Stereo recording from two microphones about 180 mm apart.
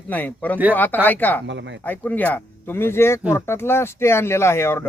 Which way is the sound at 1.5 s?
90° right.